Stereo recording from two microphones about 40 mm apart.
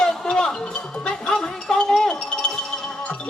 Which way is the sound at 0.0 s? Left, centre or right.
Left.